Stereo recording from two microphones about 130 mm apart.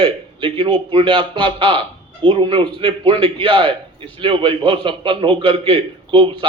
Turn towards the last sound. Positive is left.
turn(degrees=-40)  # may be behind; listen again after turning